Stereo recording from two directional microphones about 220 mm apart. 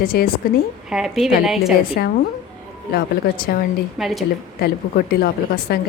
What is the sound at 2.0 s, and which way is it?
Speech, 45° left (ahead or behind).